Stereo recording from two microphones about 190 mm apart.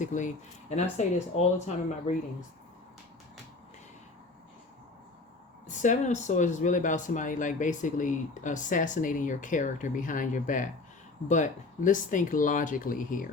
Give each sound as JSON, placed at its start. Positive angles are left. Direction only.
{"t": 0.0, "sound": "speech", "side_deg": 40}
{"t": 5.6, "sound": "speech", "side_deg": 40}